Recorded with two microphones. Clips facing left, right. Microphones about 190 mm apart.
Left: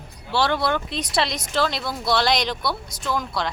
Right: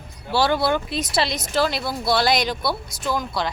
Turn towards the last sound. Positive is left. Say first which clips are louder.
# right 1 dB
turn(degrees=0)  # may be behind; listen again after turning